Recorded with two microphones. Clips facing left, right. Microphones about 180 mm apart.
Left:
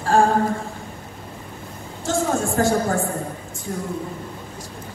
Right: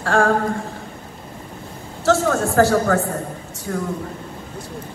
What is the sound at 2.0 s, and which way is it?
A woman's voice, 70° right (ahead or behind).